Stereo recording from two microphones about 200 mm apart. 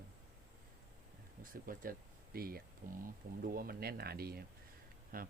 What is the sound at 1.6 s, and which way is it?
Speech, 45° right (ahead or behind).